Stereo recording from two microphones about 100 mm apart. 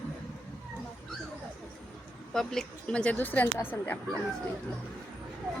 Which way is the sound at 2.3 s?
5° left (ahead or behind).